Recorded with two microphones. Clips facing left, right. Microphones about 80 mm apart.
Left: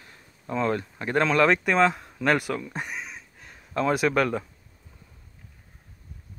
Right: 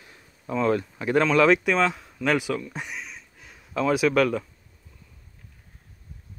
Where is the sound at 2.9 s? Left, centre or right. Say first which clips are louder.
Left 1 dB; centre.